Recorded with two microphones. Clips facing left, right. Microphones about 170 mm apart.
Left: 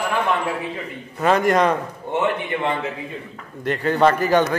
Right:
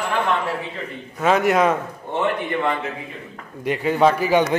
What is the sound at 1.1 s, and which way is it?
Speech, centre (ahead or behind).